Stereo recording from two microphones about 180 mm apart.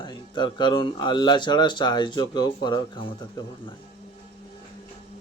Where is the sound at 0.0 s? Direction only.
25° left (ahead or behind).